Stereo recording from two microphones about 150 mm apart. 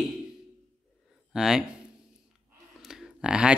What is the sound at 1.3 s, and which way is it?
Speech, 5° right (ahead or behind).